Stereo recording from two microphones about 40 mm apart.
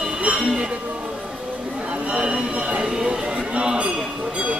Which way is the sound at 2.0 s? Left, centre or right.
Right.